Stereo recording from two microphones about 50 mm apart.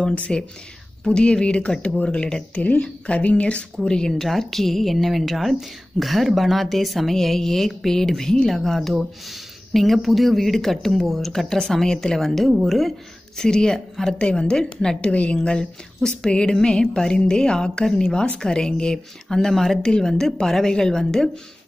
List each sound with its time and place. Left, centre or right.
0.0 s speech: left; by 12.9 s centre
13.4 s speech: centre